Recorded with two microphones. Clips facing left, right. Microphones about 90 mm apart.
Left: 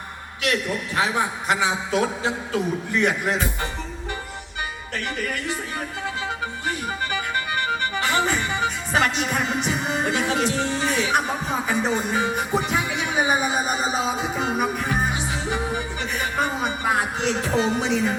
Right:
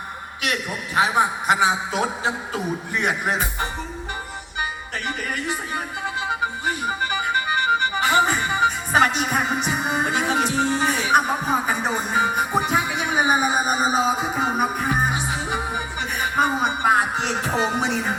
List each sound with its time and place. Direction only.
0.4 s a man's voice: 15° right (ahead or behind)
6.2 s music: 20° right (ahead or behind)
9.7 s a man's voice: 15° right (ahead or behind)
15.1 s music: 15° right (ahead or behind)
16.6 s a sound: 25° right (ahead or behind)
17.4 s speech: 25° right (ahead or behind)